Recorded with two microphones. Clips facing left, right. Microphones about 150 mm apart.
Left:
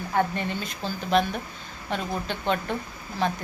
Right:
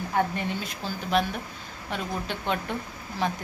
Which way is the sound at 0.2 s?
10° right (ahead or behind).